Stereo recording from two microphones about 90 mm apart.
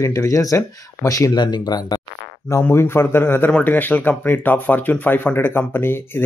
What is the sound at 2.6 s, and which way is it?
Speech, 25° left (ahead or behind).